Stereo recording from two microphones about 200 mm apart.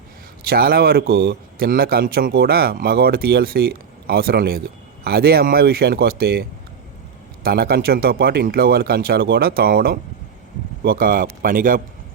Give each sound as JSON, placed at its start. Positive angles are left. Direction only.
{"t": 0.4, "sound": "a man's voice", "side_deg": -50}
{"t": 7.4, "sound": "a man's voice", "side_deg": -50}